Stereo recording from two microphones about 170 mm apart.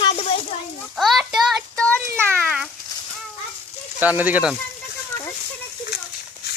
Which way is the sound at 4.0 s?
10° right (ahead or behind).